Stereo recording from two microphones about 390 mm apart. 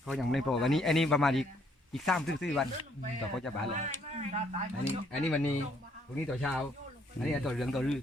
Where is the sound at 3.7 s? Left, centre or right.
Centre.